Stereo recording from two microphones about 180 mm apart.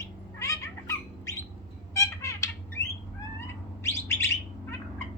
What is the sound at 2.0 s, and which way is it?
Squawk, 15° left (ahead or behind).